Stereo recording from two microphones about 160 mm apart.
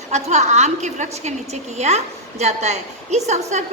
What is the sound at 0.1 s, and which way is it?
A woman's voice, 45° right (ahead or behind).